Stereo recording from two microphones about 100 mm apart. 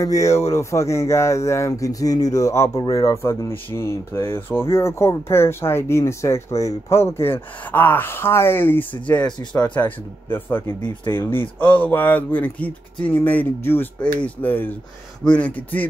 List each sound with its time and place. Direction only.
0.0 s speech: 35° left (ahead or behind); by 15.9 s 15° left (ahead or behind)